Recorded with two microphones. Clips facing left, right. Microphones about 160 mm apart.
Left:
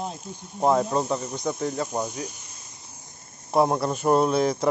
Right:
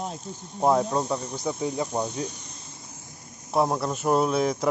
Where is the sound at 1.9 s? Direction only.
5° left (ahead or behind).